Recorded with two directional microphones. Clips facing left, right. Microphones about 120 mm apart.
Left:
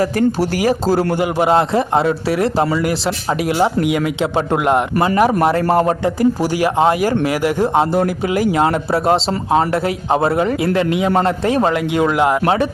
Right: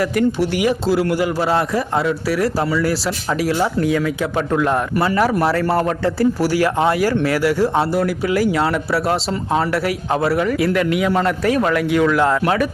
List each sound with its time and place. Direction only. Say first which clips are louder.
0.3 s speech: left 2 dB; 40° left (ahead or behind)
1.1 s speech: left 3 dB; 20° left (ahead or behind)